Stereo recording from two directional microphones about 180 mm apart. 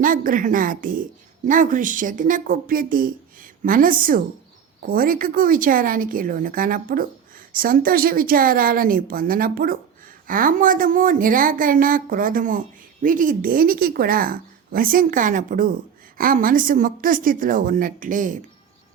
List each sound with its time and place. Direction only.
0.0 s a woman's voice: 50° right (ahead or behind)